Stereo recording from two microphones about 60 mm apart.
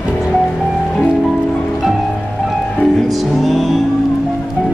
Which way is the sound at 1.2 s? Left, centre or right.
Centre.